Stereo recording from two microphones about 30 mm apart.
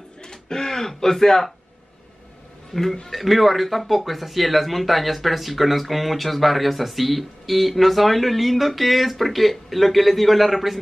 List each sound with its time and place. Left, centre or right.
0.2 s speech: left
2.7 s speech: centre